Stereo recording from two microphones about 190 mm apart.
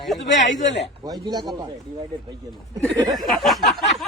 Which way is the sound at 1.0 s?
20° right (ahead or behind).